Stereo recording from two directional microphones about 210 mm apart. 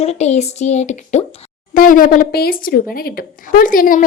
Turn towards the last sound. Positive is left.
turn(degrees=40)  # may be behind; listen again after turning